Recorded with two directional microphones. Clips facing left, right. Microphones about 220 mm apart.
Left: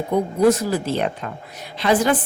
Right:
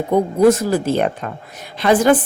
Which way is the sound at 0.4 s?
50° right (ahead or behind).